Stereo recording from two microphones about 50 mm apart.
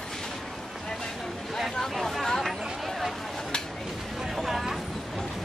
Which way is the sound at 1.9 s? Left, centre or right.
Centre.